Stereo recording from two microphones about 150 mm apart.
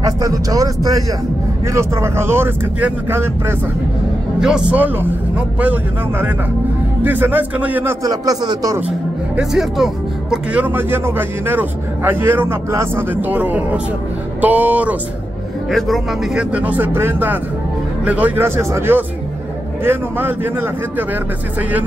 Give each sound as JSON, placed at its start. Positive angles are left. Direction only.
{"t": 0.0, "sound": "a man's voice", "side_deg": -25}
{"t": 4.4, "sound": "a man's voice", "side_deg": -5}
{"t": 8.0, "sound": "speech", "side_deg": -25}
{"t": 9.4, "sound": "a man's voice", "side_deg": 0}
{"t": 15.7, "sound": "a man's voice", "side_deg": 0}